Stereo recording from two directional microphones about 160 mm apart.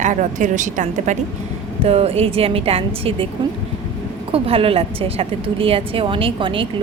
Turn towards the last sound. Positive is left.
turn(degrees=-35)  # may be behind; listen again after turning